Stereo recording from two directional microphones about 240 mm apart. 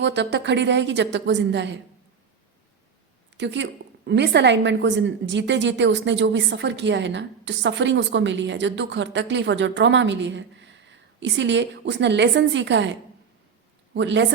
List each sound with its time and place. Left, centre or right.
0.0 s a woman's voice: right
3.3 s a woman's voice: right